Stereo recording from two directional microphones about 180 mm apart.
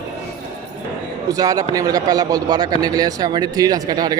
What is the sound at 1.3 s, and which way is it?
A man's voice, 20° right (ahead or behind).